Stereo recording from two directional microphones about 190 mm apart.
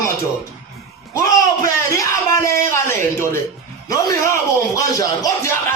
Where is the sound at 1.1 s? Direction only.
15° left (ahead or behind).